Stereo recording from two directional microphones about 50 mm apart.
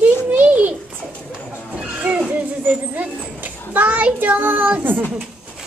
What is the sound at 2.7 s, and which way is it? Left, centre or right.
Child singing, right.